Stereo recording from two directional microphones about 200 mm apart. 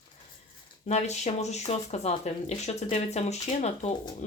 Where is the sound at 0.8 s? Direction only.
35° left (ahead or behind).